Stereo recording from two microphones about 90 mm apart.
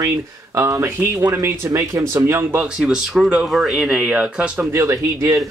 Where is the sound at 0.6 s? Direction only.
30° right (ahead or behind).